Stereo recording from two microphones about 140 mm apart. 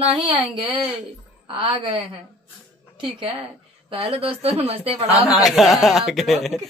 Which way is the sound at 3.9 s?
50° right (ahead or behind).